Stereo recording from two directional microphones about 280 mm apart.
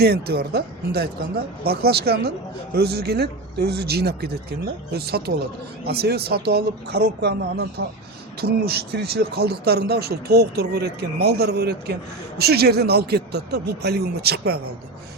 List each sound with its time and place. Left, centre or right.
0.0 s speech: right